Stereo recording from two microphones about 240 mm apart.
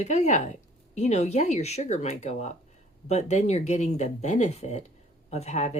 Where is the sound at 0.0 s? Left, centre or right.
Left.